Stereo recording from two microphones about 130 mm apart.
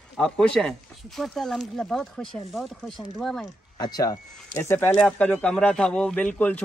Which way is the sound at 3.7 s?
30° left (ahead or behind).